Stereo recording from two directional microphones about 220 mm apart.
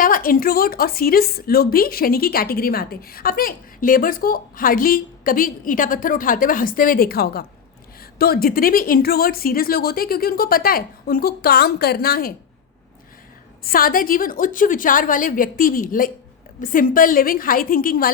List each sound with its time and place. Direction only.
0.0 s a woman's voice: 40° left (ahead or behind)
13.7 s a woman's voice: 40° left (ahead or behind)